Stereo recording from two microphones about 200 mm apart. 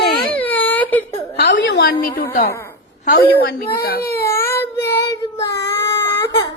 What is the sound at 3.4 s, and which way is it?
Speech, 50° left (ahead or behind).